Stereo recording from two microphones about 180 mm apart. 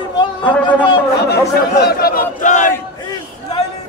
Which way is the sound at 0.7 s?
25° left (ahead or behind).